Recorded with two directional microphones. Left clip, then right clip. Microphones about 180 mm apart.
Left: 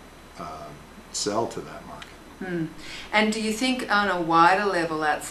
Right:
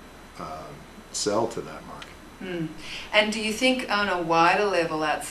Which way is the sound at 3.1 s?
40° right (ahead or behind).